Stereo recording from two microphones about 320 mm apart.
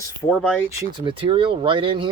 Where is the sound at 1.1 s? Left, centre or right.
Centre.